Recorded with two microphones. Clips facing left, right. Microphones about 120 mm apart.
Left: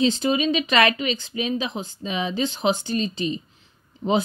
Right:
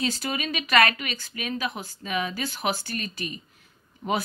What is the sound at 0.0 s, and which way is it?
Speech, 25° left (ahead or behind).